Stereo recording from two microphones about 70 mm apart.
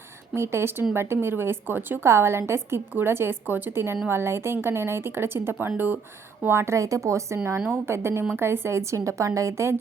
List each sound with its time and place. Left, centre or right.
0.3 s a woman's voice: right